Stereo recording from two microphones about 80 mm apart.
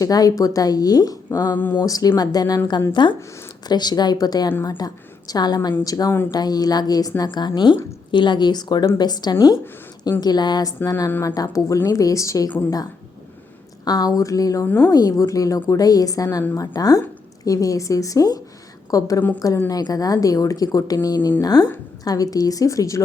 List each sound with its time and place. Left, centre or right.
0.0 s speech: left
1.5 s speech: left
1.8 s speech: left
2.9 s speech: left
3.7 s a woman's voice: left
13.8 s a woman's voice: left